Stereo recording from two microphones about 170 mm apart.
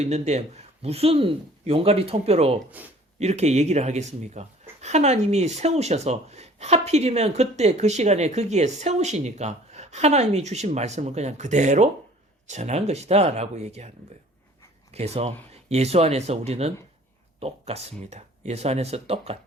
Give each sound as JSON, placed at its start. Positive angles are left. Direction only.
{"t": 0.0, "sound": "speech", "side_deg": -40}
{"t": 2.8, "sound": "speech", "side_deg": -10}
{"t": 3.2, "sound": "speech", "side_deg": -40}
{"t": 14.9, "sound": "speech", "side_deg": -40}